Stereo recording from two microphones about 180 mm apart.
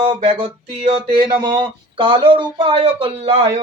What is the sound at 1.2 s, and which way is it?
Speech, 20° right (ahead or behind).